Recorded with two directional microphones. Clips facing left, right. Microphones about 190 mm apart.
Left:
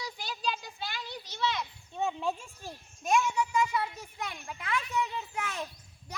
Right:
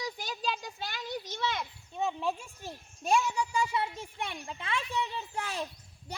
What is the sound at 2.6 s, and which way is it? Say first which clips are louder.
A child's voice: right 1 dB; 30° right (ahead or behind).